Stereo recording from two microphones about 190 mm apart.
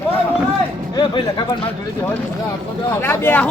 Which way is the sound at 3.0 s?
10° left (ahead or behind).